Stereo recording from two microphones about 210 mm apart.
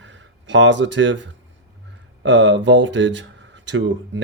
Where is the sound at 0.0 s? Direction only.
60° right (ahead or behind).